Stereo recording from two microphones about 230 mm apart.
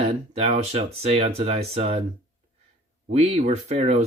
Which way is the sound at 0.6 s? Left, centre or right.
Right.